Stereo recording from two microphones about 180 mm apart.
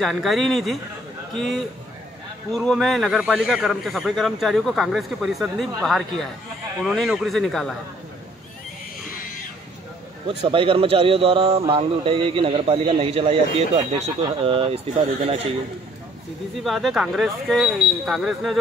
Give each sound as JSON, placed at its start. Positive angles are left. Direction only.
{"t": 0.0, "sound": "a man's voice", "side_deg": 0}
{"t": 10.2, "sound": "a man's voice", "side_deg": -30}
{"t": 16.6, "sound": "a man's voice", "side_deg": 0}